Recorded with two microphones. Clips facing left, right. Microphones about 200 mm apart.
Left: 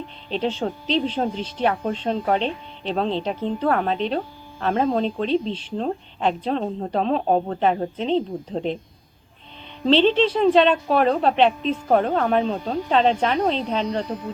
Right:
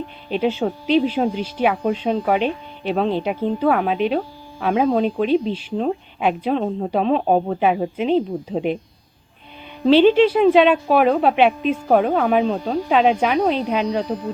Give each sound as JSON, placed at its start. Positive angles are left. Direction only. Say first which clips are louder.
{"t": 0.3, "sound": "speech", "louder": "right 4 dB", "side_deg": -10}
{"t": 9.8, "sound": "speech", "louder": "right 5 dB", "side_deg": -5}